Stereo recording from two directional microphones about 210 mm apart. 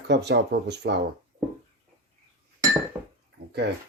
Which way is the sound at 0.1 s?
55° right (ahead or behind).